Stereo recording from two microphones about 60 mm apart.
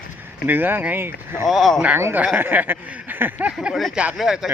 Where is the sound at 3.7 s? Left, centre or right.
Centre.